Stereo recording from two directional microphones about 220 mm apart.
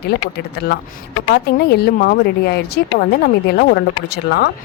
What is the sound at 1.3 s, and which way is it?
A woman's voice, 45° left (ahead or behind).